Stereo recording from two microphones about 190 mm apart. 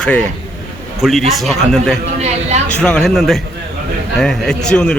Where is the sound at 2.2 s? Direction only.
35° right (ahead or behind).